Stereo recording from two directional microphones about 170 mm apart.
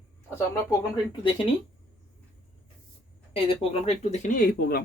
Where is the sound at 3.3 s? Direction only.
35° left (ahead or behind); by 4.8 s 65° left (ahead or behind).